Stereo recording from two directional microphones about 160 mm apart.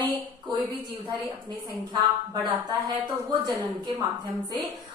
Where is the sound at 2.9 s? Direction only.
25° right (ahead or behind).